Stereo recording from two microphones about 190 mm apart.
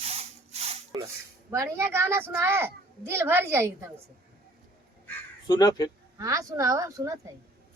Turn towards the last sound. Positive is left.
turn(degrees=-15)  # may be behind; listen again after turning